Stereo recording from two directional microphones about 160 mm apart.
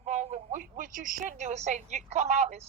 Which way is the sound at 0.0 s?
45° right (ahead or behind).